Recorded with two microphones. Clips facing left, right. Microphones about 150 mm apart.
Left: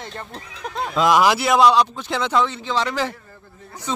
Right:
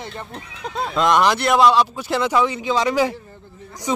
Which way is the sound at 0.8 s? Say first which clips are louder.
Left 1 dB; 5° left (ahead or behind).